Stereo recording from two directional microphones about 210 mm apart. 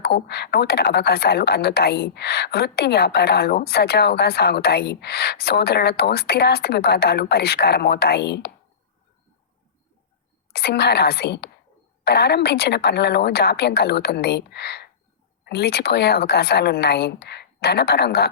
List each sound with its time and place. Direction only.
0.0 s a woman's voice: 50° left (ahead or behind)
10.5 s a woman's voice: 50° left (ahead or behind)